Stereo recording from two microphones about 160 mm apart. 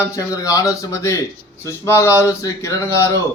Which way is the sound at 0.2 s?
20° left (ahead or behind).